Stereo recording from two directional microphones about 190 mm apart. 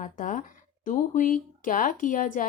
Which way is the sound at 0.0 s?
45° left (ahead or behind).